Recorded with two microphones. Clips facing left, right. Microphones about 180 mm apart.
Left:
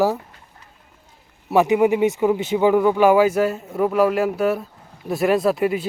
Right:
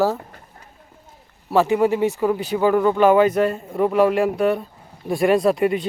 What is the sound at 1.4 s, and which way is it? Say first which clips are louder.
Speech: left 1 dB; 15° left (ahead or behind).